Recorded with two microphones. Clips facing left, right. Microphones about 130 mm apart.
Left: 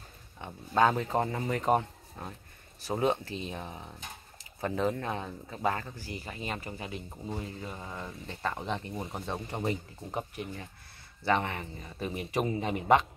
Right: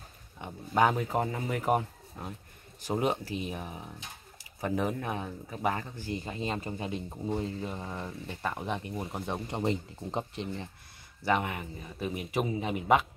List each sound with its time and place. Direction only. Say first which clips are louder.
0.4 s speech: even; 15° right (ahead or behind)
11.2 s speech: even; 10° right (ahead or behind)